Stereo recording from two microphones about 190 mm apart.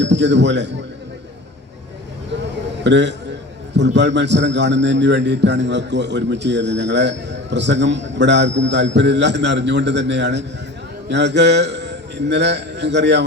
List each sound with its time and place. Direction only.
0.0 s speech: 65° right (ahead or behind)
2.4 s a sound: 65° right (ahead or behind)
3.8 s a man's voice: 65° right (ahead or behind)